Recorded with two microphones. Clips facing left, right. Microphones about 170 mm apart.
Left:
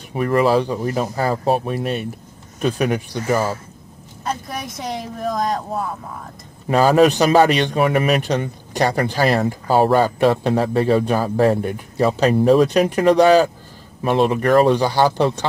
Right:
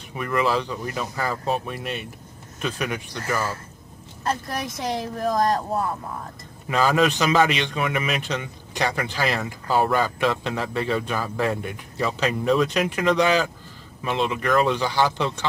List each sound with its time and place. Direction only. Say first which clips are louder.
0.1 s a man's voice: left 7 dB; 35° left (ahead or behind)
4.2 s speech: even; centre (ahead or behind)
6.7 s a man's voice: left 7 dB; 35° left (ahead or behind)